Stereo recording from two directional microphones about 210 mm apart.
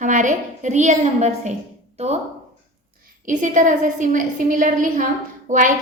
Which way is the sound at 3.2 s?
40° right (ahead or behind).